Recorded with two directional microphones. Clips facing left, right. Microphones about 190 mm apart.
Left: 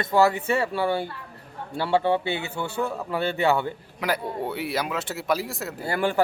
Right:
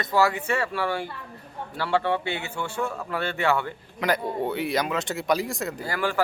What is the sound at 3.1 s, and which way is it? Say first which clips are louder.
Speech: left 3 dB; 20° left (ahead or behind).